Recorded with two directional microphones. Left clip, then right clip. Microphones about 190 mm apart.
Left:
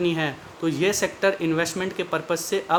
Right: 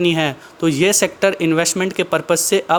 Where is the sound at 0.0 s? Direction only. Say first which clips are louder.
Right 7 dB; 40° right (ahead or behind).